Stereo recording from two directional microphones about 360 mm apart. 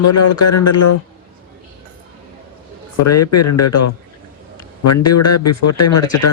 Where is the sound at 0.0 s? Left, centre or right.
Left.